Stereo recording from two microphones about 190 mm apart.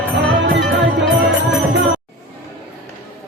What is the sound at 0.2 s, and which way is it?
Music, 80° right.